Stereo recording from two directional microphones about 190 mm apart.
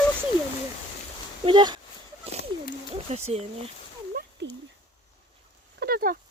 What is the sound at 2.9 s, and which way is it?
Speech, 35° right (ahead or behind).